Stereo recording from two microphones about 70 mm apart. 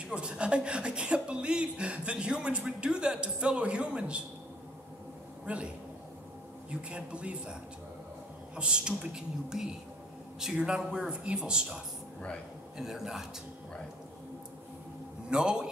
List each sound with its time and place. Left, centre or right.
0.0 s speech: centre
5.4 s a man's voice: centre
6.7 s speech: centre
8.5 s speech: centre
15.2 s speech: centre